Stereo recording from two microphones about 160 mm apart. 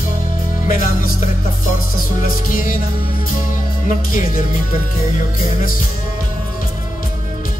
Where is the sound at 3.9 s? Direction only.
60° left (ahead or behind).